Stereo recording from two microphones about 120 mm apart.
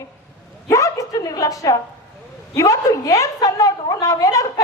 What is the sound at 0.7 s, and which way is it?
A woman's voice, 25° left (ahead or behind).